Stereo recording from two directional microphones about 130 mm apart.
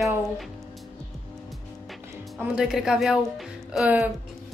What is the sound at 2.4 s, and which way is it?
Speech, 5° right (ahead or behind).